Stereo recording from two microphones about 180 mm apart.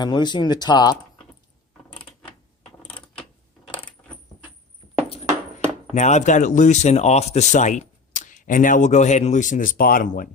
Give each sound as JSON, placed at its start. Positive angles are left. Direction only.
{"t": 0.0, "sound": "speech", "side_deg": 25}
{"t": 5.9, "sound": "speech", "side_deg": 40}